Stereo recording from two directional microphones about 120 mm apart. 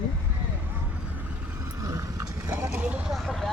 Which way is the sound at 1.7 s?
30° right (ahead or behind).